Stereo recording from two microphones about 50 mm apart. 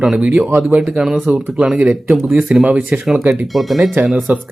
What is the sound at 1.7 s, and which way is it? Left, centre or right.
Speech, right.